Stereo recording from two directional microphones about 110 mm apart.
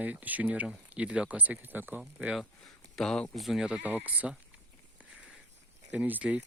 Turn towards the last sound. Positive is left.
turn(degrees=-15)  # may be behind; listen again after turning